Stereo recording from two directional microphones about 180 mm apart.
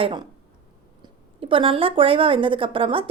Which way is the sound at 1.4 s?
30° right (ahead or behind).